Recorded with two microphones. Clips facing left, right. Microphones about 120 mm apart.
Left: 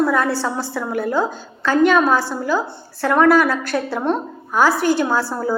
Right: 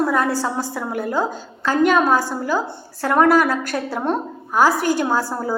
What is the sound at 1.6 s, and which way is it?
A woman's voice, 15° right (ahead or behind).